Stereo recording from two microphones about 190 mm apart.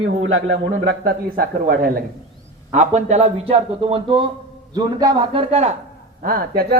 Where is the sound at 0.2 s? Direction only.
85° right.